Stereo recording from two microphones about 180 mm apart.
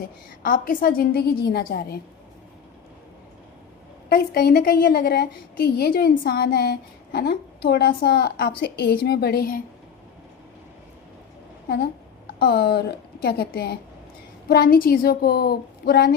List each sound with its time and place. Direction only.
0.4 s a woman's voice: 50° left (ahead or behind)
4.1 s a woman's voice: 60° left (ahead or behind)
12.4 s a woman's voice: 60° left (ahead or behind)